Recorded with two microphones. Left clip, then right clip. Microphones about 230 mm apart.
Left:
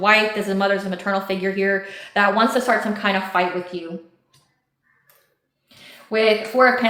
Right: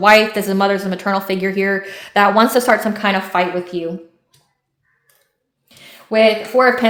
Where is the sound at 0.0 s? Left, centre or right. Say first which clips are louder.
Right 6 dB; right.